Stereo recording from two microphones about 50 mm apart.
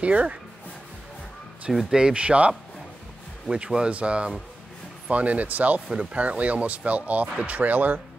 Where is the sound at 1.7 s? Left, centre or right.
Centre.